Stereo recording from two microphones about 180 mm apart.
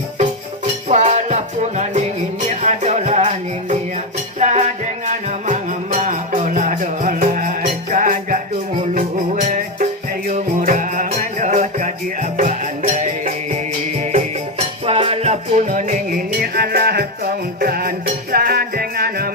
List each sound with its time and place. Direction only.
0.9 s music: 40° right (ahead or behind); by 19.3 s 55° right (ahead or behind)